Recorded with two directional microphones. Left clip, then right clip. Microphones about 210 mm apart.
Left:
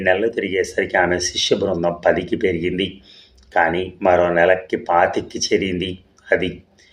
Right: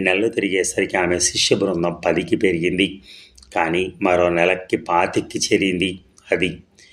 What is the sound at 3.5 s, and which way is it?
A man's voice, 25° right (ahead or behind).